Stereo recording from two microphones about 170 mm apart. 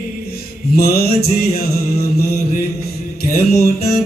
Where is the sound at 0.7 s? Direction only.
65° left (ahead or behind).